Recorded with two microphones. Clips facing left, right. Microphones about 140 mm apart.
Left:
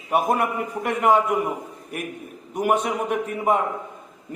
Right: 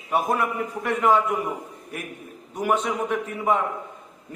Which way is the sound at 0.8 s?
15° left (ahead or behind).